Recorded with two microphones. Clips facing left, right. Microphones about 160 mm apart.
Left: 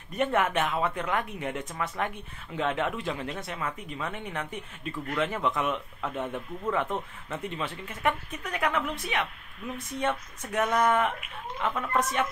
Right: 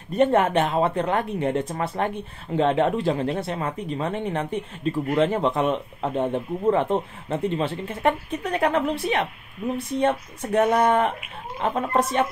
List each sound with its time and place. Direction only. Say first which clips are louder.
0.1 s speech: right 7 dB; 30° right (ahead or behind)